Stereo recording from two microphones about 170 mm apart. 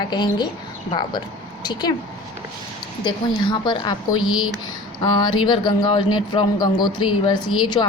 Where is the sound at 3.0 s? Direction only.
25° left (ahead or behind).